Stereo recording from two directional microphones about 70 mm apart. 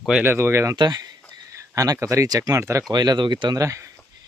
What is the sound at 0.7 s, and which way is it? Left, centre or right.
Speech, right.